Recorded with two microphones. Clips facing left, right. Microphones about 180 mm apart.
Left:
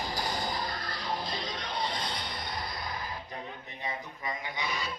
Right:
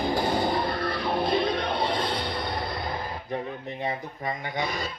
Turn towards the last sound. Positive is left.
turn(degrees=-50)  # may be behind; listen again after turning